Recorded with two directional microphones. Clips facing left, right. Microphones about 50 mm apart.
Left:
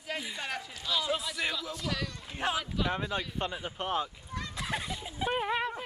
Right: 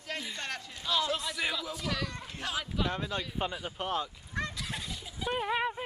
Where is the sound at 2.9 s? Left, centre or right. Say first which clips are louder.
Left 2 dB; centre.